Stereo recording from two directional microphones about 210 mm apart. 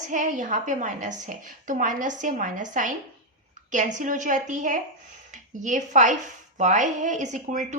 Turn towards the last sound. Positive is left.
turn(degrees=-35)  # may be behind; listen again after turning